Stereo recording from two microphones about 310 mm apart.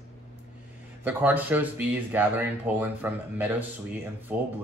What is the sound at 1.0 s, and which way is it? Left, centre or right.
Speech, centre.